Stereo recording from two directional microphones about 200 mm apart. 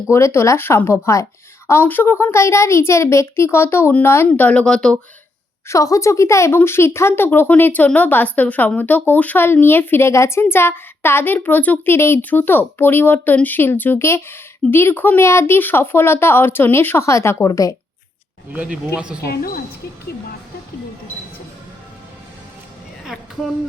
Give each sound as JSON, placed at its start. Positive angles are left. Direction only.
{"t": 0.1, "sound": "a woman's voice", "side_deg": 15}
{"t": 5.6, "sound": "a woman's voice", "side_deg": 15}
{"t": 18.5, "sound": "speech", "side_deg": -5}
{"t": 19.3, "sound": "speech", "side_deg": 50}
{"t": 23.0, "sound": "a sound", "side_deg": 0}